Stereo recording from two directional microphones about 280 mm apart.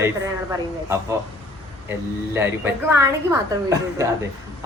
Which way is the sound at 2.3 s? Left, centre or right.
Centre.